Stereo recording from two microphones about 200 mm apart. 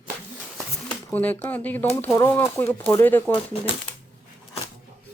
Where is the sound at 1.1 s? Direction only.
10° left (ahead or behind).